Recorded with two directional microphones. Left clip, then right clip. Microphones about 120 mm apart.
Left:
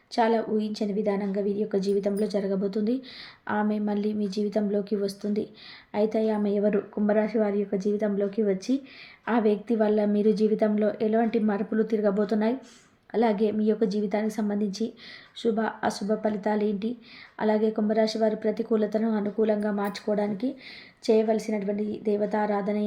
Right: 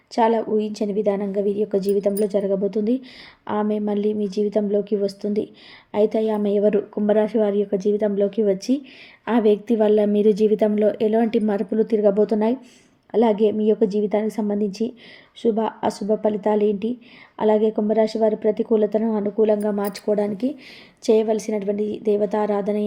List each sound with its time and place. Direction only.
0.1 s a woman's voice: 35° right (ahead or behind)